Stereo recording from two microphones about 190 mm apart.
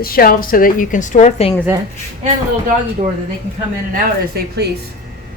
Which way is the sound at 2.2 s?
35° right (ahead or behind).